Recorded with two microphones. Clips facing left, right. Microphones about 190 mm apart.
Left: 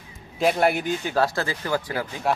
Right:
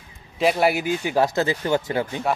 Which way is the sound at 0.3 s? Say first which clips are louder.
Right 1 dB; 5° right (ahead or behind).